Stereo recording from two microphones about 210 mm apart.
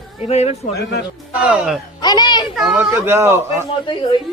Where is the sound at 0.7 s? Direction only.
50° left (ahead or behind).